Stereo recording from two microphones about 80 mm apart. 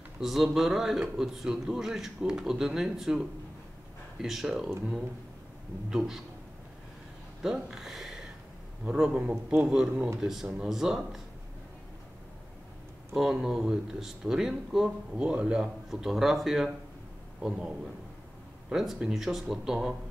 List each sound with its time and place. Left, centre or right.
0.2 s speech: centre
5.9 s speech: centre
7.4 s a man's voice: centre
13.1 s speech: centre
17.4 s a man's voice: centre